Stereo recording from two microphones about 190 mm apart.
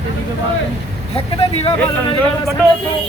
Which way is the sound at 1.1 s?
30° left (ahead or behind).